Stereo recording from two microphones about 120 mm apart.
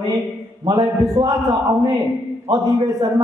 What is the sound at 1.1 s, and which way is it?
A man's voice, 35° right (ahead or behind).